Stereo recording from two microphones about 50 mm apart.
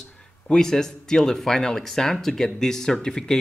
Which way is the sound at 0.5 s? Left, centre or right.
Centre.